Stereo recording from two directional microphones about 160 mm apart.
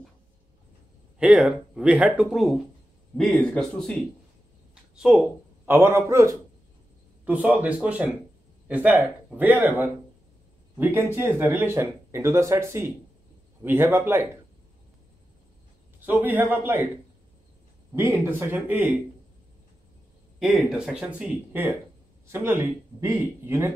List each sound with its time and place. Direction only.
1.2 s speech: 5° right (ahead or behind)
16.1 s speech: 10° right (ahead or behind)
18.2 s speech: 10° right (ahead or behind)
20.3 s speech: centre (ahead or behind)